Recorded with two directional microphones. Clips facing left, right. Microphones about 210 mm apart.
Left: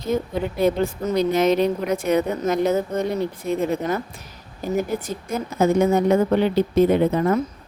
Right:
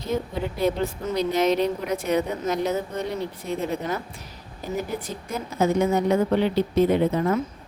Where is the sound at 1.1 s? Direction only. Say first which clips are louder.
Left 3 dB; 50° left (ahead or behind).